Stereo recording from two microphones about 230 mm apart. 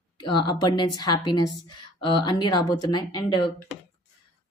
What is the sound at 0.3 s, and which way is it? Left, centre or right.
Speech, centre.